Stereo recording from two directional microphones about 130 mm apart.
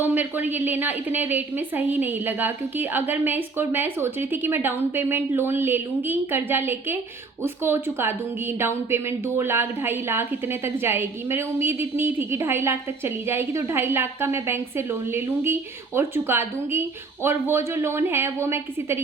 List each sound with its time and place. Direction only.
0.0 s a woman's voice: 15° right (ahead or behind)